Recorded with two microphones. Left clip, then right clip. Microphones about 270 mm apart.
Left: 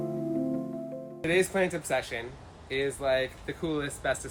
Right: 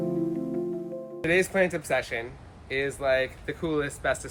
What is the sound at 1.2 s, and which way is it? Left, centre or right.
Speech, centre.